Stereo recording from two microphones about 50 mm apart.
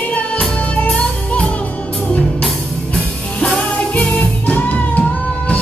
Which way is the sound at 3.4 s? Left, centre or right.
Left.